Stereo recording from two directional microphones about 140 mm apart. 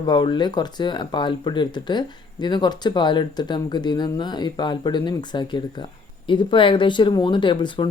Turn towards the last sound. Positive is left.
turn(degrees=35)  # may be behind; listen again after turning